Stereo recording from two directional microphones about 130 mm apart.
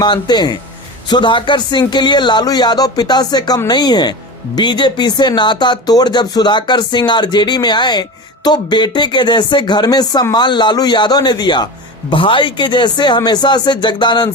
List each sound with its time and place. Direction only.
0.0 s speech: 35° left (ahead or behind)